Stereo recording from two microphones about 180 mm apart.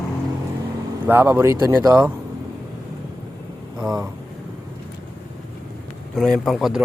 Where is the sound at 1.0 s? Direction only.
10° right (ahead or behind).